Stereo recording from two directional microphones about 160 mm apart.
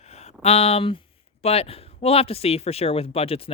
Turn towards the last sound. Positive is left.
turn(degrees=35)  # may be behind; listen again after turning